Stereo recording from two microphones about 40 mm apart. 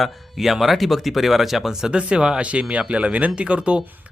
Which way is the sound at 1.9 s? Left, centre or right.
Right.